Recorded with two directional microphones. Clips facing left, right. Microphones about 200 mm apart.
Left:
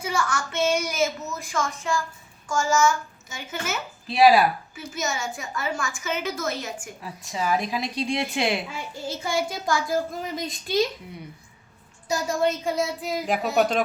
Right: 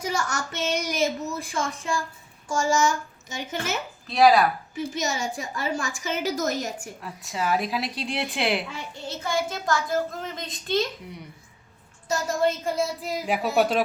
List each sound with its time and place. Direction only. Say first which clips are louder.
0.0 s a woman's voice: left 1 dB; 40° right (ahead or behind)
4.1 s speech: left 1 dB; 5° left (ahead or behind)
4.8 s a woman's voice: right 3 dB; 35° right (ahead or behind)
7.0 s a child's voice: even; centre (ahead or behind)
12.1 s a child's voice: even; centre (ahead or behind)